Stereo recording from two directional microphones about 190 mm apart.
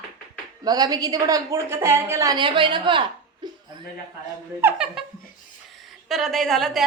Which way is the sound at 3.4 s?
20° right (ahead or behind).